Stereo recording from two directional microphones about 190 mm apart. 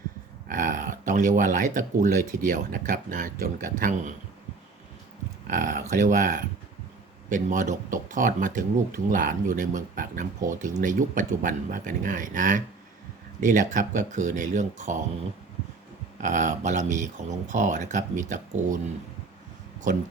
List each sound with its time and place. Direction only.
0.4 s speech: 45° right (ahead or behind)
5.5 s speech: 45° right (ahead or behind)
16.2 s speech: 40° right (ahead or behind)